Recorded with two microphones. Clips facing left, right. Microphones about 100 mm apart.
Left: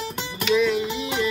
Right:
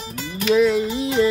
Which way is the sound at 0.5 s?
35° right (ahead or behind).